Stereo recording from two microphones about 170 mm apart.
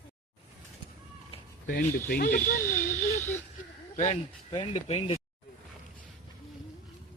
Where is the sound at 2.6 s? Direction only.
15° left (ahead or behind).